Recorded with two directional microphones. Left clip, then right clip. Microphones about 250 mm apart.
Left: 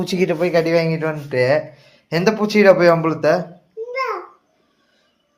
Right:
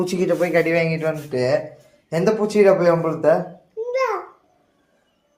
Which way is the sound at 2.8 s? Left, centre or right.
Left.